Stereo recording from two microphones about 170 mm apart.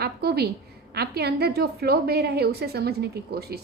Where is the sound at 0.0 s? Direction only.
70° right (ahead or behind).